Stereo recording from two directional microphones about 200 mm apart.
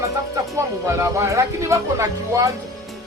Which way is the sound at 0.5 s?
15° right (ahead or behind).